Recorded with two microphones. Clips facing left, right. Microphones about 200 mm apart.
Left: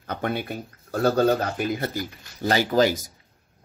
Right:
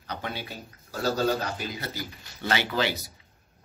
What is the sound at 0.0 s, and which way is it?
Speech, 50° left (ahead or behind).